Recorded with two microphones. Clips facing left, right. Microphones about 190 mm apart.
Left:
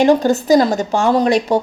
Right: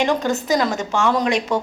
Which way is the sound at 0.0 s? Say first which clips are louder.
Left 7 dB; 35° left (ahead or behind).